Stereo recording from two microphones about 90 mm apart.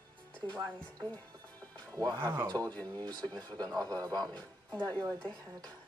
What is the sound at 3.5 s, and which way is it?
Speech, 50° right (ahead or behind).